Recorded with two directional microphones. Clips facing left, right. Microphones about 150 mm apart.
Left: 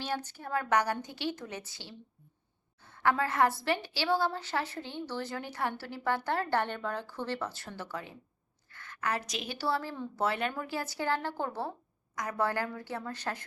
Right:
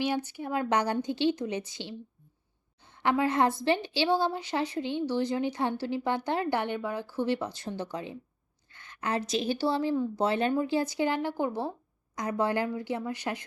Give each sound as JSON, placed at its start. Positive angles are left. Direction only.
{"t": 0.0, "sound": "a woman's voice", "side_deg": -10}
{"t": 9.9, "sound": "a woman's voice", "side_deg": -10}
{"t": 10.2, "sound": "a woman's voice", "side_deg": -25}